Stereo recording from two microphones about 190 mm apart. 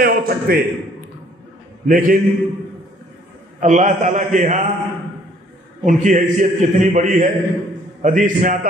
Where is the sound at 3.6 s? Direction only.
40° right (ahead or behind).